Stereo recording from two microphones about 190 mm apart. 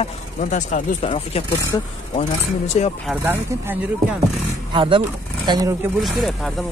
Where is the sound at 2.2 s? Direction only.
35° left (ahead or behind).